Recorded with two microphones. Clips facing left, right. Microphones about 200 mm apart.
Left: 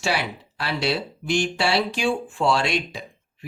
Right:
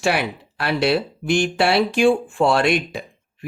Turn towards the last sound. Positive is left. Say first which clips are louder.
# right 5 dB
turn(degrees=-55)  # may be behind; listen again after turning